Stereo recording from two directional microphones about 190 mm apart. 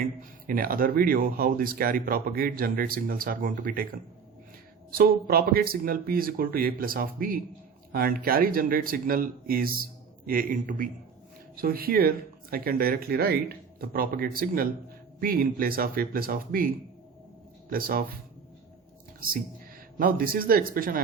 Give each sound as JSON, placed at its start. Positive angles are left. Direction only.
{"t": 0.0, "sound": "speech", "side_deg": -50}
{"t": 4.9, "sound": "speech", "side_deg": -50}
{"t": 20.0, "sound": "speech", "side_deg": -50}